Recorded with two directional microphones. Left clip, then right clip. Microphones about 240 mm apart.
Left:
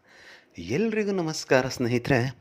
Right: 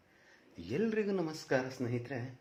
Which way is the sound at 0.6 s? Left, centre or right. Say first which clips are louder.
Left 8 dB; left.